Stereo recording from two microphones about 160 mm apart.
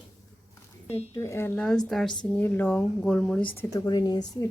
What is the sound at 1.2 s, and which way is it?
Speech, 15° left (ahead or behind).